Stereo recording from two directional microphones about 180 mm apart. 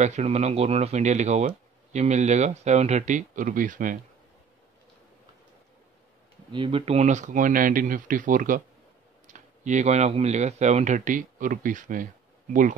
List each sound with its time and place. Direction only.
0.0 s speech: 40° right (ahead or behind)
6.5 s speech: 30° right (ahead or behind); by 12.1 s 50° right (ahead or behind)